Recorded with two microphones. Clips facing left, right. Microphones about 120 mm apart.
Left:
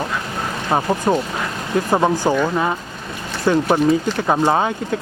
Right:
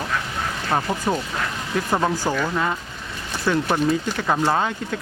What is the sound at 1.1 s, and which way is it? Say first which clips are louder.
Speech: left 6 dB; 40° left (ahead or behind).